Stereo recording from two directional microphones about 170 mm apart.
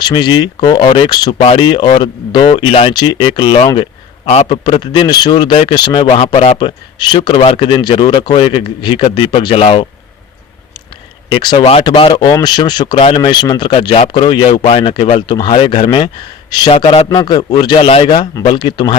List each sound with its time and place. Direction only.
0.0 s a man's voice: 25° left (ahead or behind)
11.3 s a man's voice: 25° left (ahead or behind)
13.7 s a man's voice: 35° left (ahead or behind)